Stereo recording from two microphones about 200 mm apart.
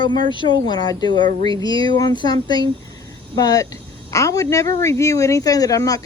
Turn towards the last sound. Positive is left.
turn(degrees=15)  # may be behind; listen again after turning